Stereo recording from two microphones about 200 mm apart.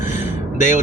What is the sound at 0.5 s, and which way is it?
Speech, 35° left (ahead or behind).